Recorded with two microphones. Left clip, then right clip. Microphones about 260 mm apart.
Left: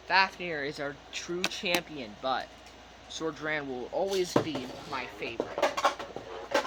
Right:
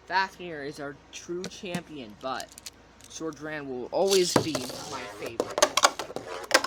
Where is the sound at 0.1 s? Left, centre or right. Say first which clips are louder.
Left 2 dB; centre.